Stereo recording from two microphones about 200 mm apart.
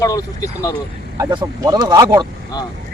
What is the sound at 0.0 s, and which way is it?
Speech, 15° left (ahead or behind).